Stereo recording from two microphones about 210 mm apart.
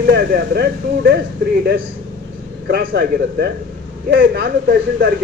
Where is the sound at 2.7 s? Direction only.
45° right (ahead or behind).